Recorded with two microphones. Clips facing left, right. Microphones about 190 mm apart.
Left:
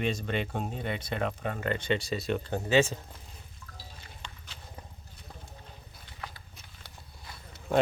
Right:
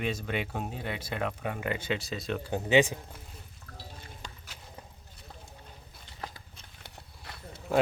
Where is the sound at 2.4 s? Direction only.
15° right (ahead or behind).